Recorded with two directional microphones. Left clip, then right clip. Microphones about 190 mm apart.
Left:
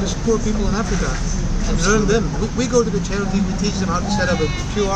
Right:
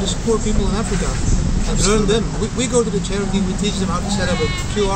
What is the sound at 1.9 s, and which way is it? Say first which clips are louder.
Speech: even; 10° right (ahead or behind).